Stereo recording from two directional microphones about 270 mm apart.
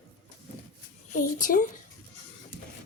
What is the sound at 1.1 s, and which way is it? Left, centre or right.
Speech, left.